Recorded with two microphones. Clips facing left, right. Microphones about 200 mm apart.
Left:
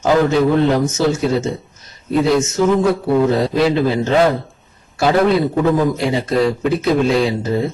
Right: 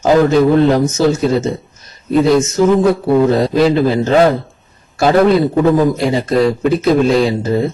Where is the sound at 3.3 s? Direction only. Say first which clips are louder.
Right 3 dB; 40° right (ahead or behind).